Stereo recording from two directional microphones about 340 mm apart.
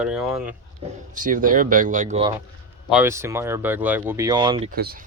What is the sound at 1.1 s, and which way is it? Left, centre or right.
Speech, right.